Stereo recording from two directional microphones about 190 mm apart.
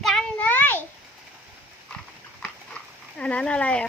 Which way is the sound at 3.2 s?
5° left (ahead or behind).